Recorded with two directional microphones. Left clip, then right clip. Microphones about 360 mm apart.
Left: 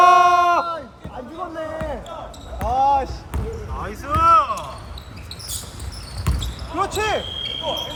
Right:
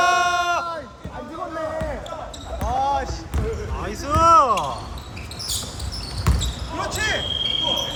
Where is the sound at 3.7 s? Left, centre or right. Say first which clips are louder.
Even; centre.